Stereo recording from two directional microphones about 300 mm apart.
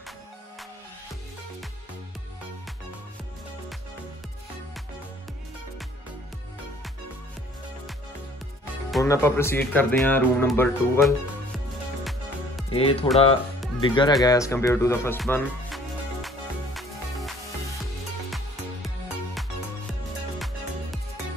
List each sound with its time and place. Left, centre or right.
8.9 s speech: centre
12.0 s music: centre
12.7 s speech: centre
14.2 s music: centre
20.3 s music: centre